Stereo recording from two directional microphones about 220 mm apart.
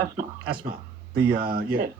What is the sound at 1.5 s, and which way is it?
Speech, 45° right (ahead or behind).